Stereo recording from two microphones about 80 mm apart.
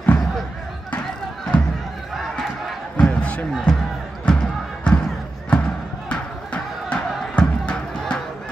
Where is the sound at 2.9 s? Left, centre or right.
Centre.